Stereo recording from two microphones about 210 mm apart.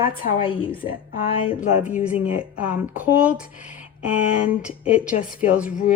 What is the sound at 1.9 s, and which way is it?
Speech, 5° right (ahead or behind).